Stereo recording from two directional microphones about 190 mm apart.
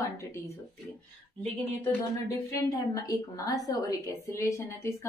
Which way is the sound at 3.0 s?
20° left (ahead or behind).